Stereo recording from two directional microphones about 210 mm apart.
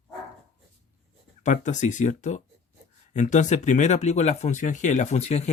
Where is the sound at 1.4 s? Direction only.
35° left (ahead or behind).